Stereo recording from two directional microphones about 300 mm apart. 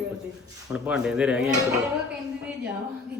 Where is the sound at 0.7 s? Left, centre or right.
Centre.